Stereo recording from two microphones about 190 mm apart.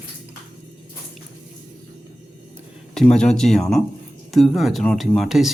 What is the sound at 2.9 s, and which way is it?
Speech, 5° left (ahead or behind).